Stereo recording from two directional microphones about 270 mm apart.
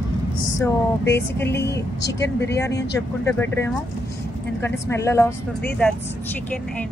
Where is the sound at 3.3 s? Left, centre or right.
Centre.